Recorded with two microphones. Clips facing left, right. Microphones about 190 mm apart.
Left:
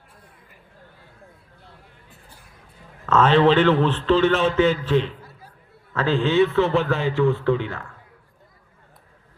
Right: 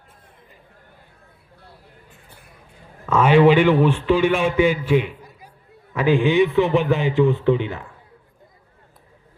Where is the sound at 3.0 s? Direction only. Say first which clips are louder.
Right 2 dB; 10° right (ahead or behind).